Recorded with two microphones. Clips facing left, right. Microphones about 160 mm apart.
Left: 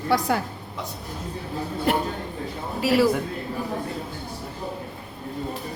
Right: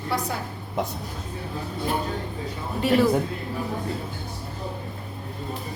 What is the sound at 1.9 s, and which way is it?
Speech, 80° left.